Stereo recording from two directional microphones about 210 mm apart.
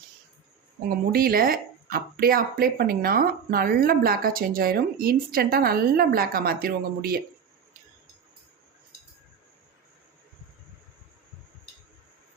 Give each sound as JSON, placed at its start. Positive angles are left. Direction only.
{"t": 0.9, "sound": "speech", "side_deg": -45}